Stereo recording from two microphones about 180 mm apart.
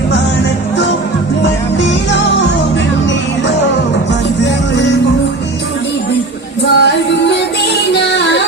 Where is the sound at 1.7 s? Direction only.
80° left.